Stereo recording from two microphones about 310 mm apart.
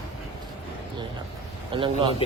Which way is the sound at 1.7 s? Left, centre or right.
Centre.